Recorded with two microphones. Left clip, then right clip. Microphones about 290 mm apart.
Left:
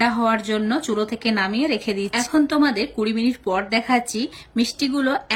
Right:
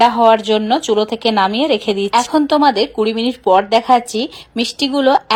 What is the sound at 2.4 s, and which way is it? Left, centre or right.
A woman's voice, right.